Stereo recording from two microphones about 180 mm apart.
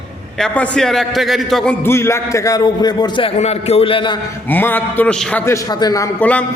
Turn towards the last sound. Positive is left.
turn(degrees=20)  # may be behind; listen again after turning